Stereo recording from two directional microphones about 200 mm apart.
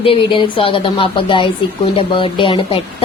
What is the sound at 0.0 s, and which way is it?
A woman's voice, 25° left (ahead or behind).